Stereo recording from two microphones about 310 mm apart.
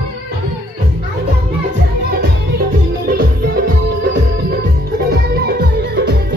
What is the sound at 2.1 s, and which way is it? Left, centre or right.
Music, right.